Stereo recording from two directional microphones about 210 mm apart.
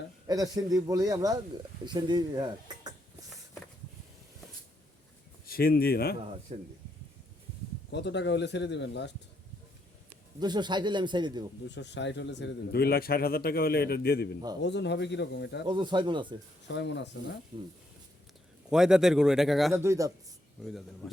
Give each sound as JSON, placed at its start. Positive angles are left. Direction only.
{"t": 0.3, "sound": "a man's voice", "side_deg": -15}
{"t": 5.5, "sound": "speech", "side_deg": 45}
{"t": 6.5, "sound": "speech", "side_deg": -30}
{"t": 7.9, "sound": "a man's voice", "side_deg": 55}
{"t": 10.4, "sound": "speech", "side_deg": -20}
{"t": 11.7, "sound": "a man's voice", "side_deg": 55}
{"t": 15.6, "sound": "speech", "side_deg": -20}
{"t": 16.6, "sound": "a man's voice", "side_deg": 55}
{"t": 18.7, "sound": "speech", "side_deg": -5}
{"t": 19.8, "sound": "a man's voice", "side_deg": -15}
{"t": 20.7, "sound": "speech", "side_deg": 0}